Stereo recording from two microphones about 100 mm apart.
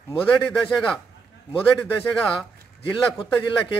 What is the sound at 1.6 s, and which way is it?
Speech, 20° left (ahead or behind).